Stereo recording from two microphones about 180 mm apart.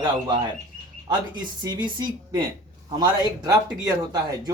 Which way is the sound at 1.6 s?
25° right (ahead or behind).